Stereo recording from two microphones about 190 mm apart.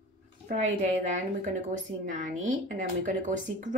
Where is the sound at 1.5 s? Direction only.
40° right (ahead or behind).